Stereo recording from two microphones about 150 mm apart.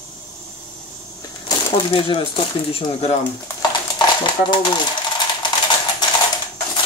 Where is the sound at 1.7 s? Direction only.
35° left (ahead or behind).